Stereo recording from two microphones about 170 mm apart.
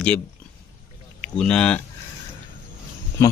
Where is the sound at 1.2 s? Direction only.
5° left (ahead or behind).